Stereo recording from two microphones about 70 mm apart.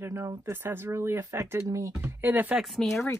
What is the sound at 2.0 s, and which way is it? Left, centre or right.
Speech, right.